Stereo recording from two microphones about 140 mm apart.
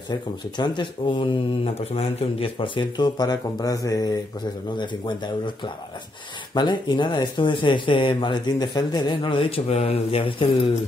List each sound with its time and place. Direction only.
0.1 s speech: 30° left (ahead or behind)